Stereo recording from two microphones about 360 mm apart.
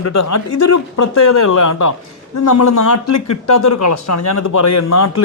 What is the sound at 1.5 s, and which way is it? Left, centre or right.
A man's voice, left.